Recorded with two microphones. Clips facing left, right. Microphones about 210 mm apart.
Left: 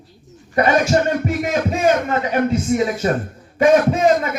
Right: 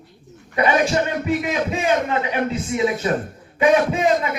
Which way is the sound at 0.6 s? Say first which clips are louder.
Left 3 dB; 45° left (ahead or behind).